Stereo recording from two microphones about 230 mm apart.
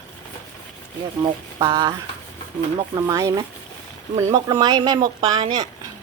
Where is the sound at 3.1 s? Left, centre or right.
Centre.